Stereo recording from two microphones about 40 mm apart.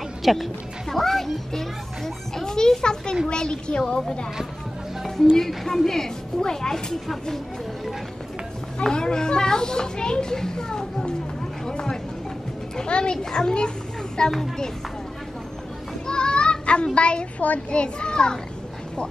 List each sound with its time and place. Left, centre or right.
0.2 s a woman's voice: centre; by 3.8 s left
5.3 s a child's voice: centre
8.9 s a child's voice: centre
11.6 s a sound: centre
12.7 s a child's voice: left
16.1 s child singing: left
17.6 s a child's voice: left